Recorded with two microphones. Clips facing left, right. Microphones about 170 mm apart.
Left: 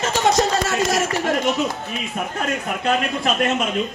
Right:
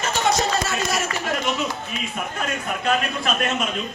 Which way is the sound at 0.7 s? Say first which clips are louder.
Left 5 dB; 90° left.